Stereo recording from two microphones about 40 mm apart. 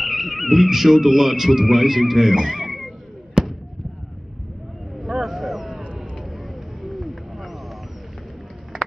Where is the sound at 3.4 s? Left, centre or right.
Centre.